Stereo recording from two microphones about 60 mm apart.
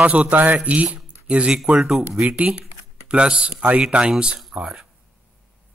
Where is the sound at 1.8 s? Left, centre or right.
Centre.